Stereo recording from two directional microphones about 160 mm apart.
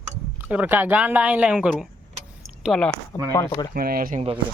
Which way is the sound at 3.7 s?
65° right (ahead or behind).